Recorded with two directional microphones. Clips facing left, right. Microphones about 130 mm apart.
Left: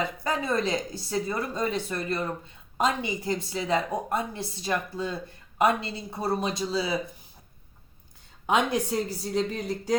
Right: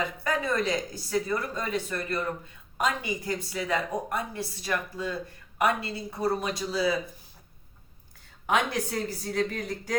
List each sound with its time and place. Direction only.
0.3 s a woman's voice: 25° left (ahead or behind)
8.4 s a woman's voice: 20° left (ahead or behind)